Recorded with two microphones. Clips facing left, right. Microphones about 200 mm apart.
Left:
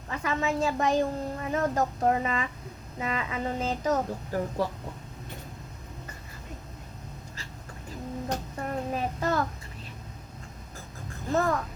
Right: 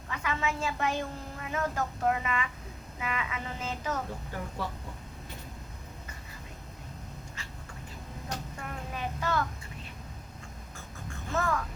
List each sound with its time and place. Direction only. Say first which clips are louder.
0.1 s a woman's voice: left 4 dB; 40° left (ahead or behind)
8.5 s a sound: left 8 dB; 40° left (ahead or behind)
11.1 s music: left 5 dB; 35° left (ahead or behind)